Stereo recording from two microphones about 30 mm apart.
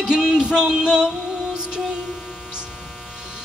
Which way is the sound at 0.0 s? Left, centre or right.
Right.